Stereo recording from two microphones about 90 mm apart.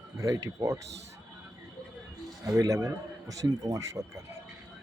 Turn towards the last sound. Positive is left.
turn(degrees=-35)  # may be behind; listen again after turning